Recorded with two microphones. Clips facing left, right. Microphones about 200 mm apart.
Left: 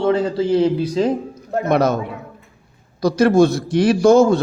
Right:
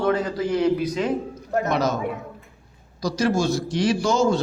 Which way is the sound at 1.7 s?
60° left (ahead or behind).